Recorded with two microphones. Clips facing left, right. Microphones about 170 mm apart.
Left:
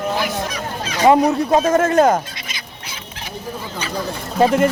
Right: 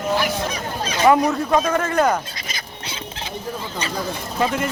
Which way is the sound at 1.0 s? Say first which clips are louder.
Left 3 dB; 20° left (ahead or behind).